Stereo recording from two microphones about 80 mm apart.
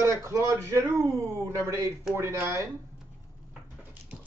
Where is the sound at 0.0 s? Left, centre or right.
Right.